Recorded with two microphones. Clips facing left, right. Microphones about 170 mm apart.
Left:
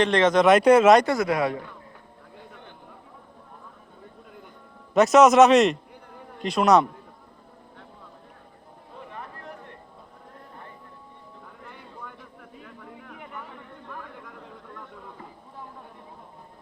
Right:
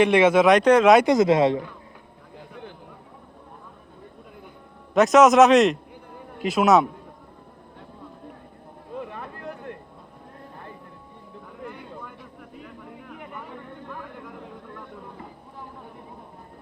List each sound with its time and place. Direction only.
0.0 s speech: 10° right (ahead or behind); by 0.9 s 5° left (ahead or behind)
1.0 s speech: 20° right (ahead or behind)
4.9 s speech: centre (ahead or behind)